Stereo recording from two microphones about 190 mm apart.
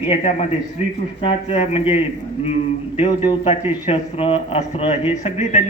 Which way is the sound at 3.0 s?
30° left (ahead or behind).